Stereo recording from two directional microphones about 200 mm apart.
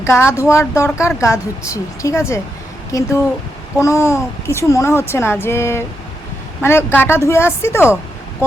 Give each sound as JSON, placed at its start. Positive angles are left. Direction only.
{"t": 0.0, "sound": "a woman's voice", "side_deg": 15}